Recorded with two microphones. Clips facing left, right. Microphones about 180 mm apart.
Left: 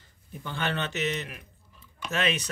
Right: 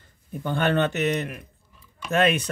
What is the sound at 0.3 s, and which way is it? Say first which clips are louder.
Speech: right 8 dB; 55° right (ahead or behind).